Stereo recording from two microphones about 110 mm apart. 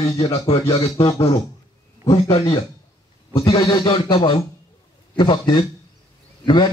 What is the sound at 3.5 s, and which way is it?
A man's voice, 40° left (ahead or behind).